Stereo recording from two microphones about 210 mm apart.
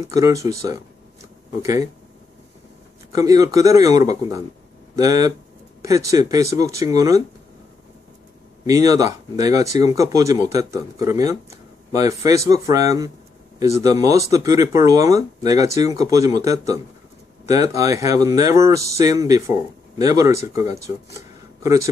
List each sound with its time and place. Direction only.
0.0 s speech: 15° right (ahead or behind)
3.1 s speech: 15° right (ahead or behind)
8.6 s speech: 15° right (ahead or behind)